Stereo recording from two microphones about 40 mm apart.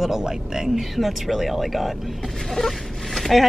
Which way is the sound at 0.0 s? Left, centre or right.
Centre.